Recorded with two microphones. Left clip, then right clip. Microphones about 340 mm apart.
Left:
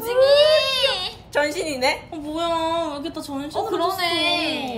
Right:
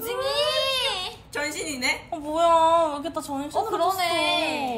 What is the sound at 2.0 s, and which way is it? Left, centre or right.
Speech, centre.